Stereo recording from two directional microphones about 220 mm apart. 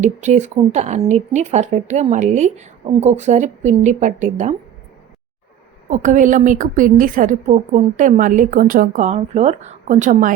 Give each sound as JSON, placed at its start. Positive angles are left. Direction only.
{"t": 0.0, "sound": "speech", "side_deg": -35}
{"t": 5.9, "sound": "speech", "side_deg": -35}